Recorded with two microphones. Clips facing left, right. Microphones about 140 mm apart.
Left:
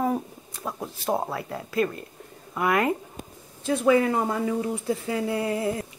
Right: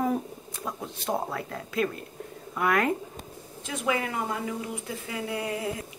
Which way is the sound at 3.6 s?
35° left (ahead or behind).